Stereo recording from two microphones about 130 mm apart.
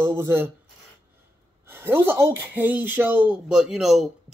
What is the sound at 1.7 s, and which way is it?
Speech, 15° right (ahead or behind).